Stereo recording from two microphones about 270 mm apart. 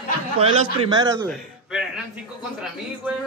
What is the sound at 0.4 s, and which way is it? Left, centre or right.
Speech, centre.